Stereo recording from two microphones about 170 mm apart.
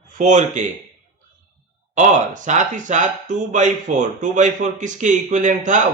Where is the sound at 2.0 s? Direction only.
45° right (ahead or behind).